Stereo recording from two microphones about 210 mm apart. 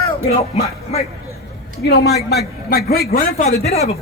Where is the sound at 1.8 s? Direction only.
50° left (ahead or behind).